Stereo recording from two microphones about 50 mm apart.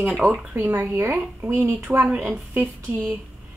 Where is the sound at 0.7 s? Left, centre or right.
Right.